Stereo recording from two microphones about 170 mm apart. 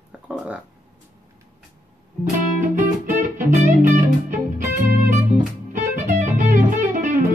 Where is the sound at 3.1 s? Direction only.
50° right (ahead or behind).